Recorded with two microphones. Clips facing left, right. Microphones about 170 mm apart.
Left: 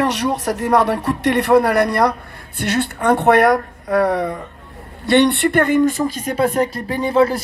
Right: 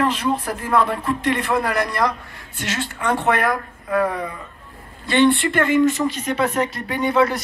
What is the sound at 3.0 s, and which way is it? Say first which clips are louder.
Speech: left 7 dB; 60° left (ahead or behind).